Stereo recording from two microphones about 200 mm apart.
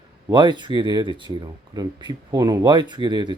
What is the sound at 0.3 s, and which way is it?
Speech, 20° right (ahead or behind).